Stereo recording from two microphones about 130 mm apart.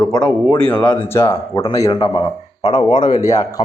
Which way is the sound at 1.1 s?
20° left (ahead or behind).